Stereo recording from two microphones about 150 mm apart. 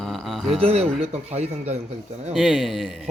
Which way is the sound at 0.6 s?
45° right (ahead or behind).